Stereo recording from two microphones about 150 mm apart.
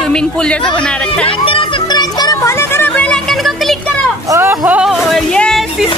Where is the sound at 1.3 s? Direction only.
35° left (ahead or behind); by 3.8 s centre (ahead or behind).